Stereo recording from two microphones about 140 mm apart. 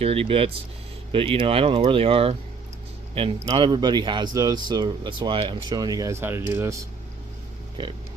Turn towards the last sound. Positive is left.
turn(degrees=-35)  # may be behind; listen again after turning